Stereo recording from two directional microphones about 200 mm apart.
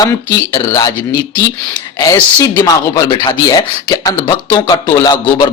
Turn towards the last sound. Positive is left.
turn(degrees=20)  # may be behind; listen again after turning